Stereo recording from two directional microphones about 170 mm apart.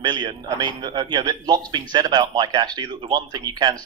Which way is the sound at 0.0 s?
25° right (ahead or behind).